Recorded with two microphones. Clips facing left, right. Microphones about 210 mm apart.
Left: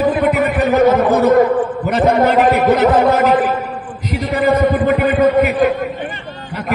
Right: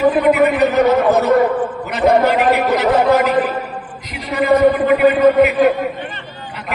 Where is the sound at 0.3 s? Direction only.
50° left (ahead or behind).